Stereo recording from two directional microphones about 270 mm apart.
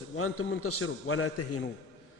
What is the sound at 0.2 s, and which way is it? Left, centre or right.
A man's voice, left.